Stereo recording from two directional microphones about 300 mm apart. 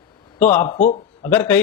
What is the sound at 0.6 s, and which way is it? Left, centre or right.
Speech, left.